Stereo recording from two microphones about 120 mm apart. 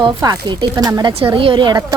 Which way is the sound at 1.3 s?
45° right (ahead or behind).